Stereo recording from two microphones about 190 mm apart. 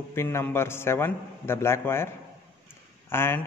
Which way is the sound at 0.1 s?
15° left (ahead or behind).